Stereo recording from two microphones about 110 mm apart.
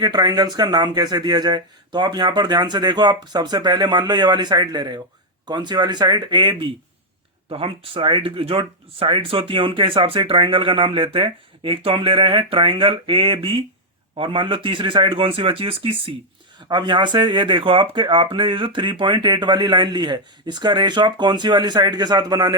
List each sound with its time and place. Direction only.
0.0 s speech: 40° right (ahead or behind); by 16.1 s 55° right (ahead or behind)
16.6 s speech: 45° right (ahead or behind)